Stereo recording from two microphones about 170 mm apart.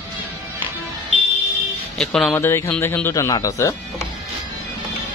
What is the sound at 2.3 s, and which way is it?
A man's voice, 15° left (ahead or behind).